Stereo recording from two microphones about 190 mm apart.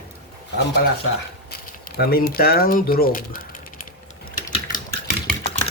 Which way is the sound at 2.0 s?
55° left (ahead or behind).